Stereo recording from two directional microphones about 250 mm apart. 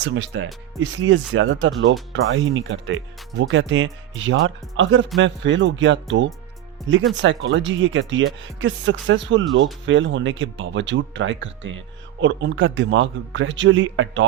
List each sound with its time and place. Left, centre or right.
0.0 s speech: right